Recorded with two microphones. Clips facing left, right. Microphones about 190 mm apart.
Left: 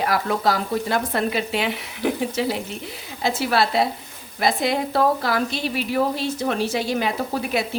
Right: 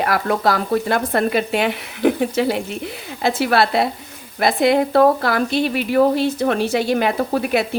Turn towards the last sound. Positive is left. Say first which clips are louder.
# right 5 dB
turn(degrees=-60)  # may be behind; listen again after turning